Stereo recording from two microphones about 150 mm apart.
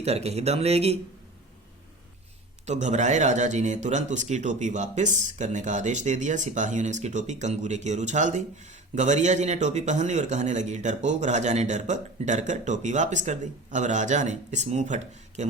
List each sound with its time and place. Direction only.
0.0 s speech: 45° right (ahead or behind)
2.6 s speech: 50° right (ahead or behind)